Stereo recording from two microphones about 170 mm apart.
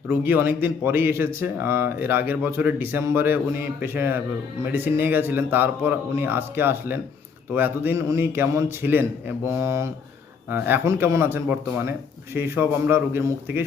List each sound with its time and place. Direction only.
0.1 s speech: 15° right (ahead or behind)